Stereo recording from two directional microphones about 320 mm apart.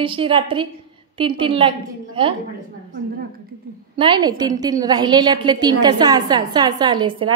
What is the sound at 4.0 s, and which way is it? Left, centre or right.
A woman's voice, centre.